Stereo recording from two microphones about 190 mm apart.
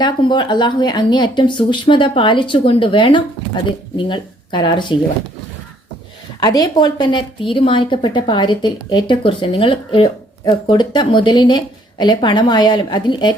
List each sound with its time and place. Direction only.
0.0 s a woman's voice: 25° left (ahead or behind)
6.4 s a woman's voice: 20° left (ahead or behind)